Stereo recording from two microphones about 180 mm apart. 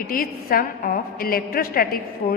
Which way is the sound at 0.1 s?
55° left (ahead or behind).